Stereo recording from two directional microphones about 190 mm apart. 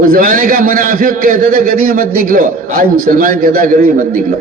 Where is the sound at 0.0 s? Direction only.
45° right (ahead or behind).